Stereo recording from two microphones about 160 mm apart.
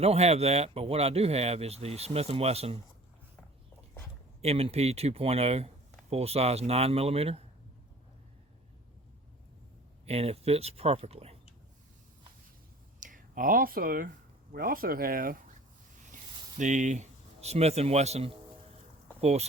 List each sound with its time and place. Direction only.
0.0 s speech: 40° right (ahead or behind)
4.4 s speech: 40° right (ahead or behind)
10.1 s speech: 40° right (ahead or behind)
13.0 s speech: 55° right (ahead or behind)
16.6 s speech: 50° right (ahead or behind)